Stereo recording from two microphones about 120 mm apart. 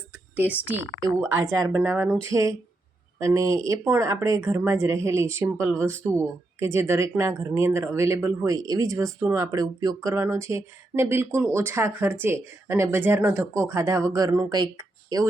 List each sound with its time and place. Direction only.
0.1 s a sound: 15° right (ahead or behind)
1.0 s speech: 25° right (ahead or behind)
8.5 s speech: 30° right (ahead or behind)